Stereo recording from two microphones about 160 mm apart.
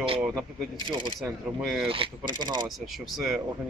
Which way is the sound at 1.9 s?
30° right (ahead or behind).